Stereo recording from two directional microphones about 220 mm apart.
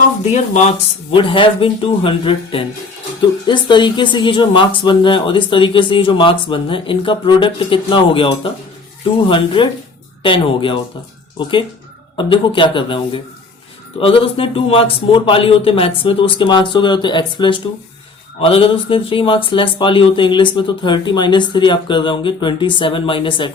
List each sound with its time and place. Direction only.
0.5 s speech: 30° left (ahead or behind)
12.1 s speech: 25° left (ahead or behind)